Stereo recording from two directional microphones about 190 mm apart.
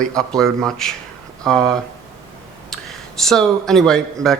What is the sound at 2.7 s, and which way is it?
Speech, centre (ahead or behind).